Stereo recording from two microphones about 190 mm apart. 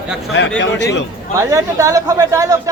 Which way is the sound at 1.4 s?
15° right (ahead or behind).